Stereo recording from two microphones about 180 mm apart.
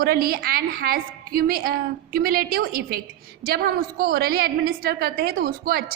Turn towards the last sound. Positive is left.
turn(degrees=-55)  # may be behind; listen again after turning